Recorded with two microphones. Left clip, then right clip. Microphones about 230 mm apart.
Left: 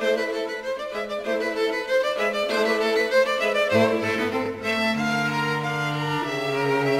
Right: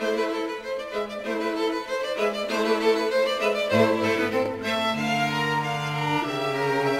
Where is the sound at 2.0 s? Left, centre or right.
Left.